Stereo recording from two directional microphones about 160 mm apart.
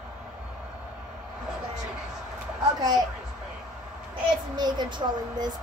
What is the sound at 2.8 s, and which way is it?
Speech, 25° right (ahead or behind).